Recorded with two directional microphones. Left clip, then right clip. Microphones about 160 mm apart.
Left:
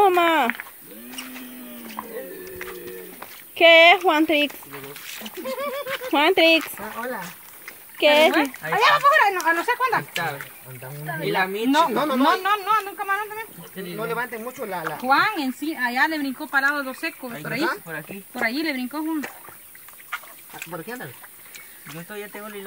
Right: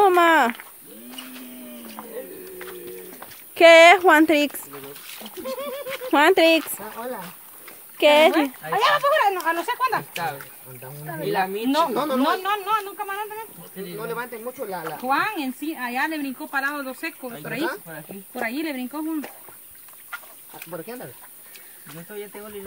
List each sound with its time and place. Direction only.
0.0 s a sound: 20° right (ahead or behind)
2.0 s a sound: 10° left (ahead or behind)
3.5 s speech: 35° right (ahead or behind)
4.8 s a woman's voice: 15° right (ahead or behind)
6.6 s speech: 5° left (ahead or behind)
8.0 s a woman's voice: 25° right (ahead or behind)
10.1 s speech: 5° right (ahead or behind)
12.2 s a woman's voice: 30° right (ahead or behind)
13.7 s speech: 5° left (ahead or behind)
14.8 s speech: centre (ahead or behind)
17.6 s speech: centre (ahead or behind)
18.3 s speech: 15° right (ahead or behind)
20.1 s a sound: 5° left (ahead or behind)
21.8 s speech: centre (ahead or behind)